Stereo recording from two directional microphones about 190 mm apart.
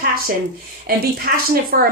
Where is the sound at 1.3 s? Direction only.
50° right (ahead or behind).